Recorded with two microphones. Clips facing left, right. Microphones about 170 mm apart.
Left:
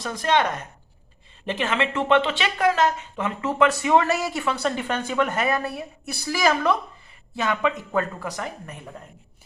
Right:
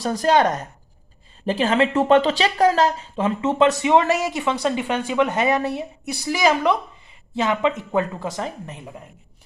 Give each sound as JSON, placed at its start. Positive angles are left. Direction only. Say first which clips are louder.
{"t": 0.0, "sound": "speech", "louder": "right 5 dB", "side_deg": -35}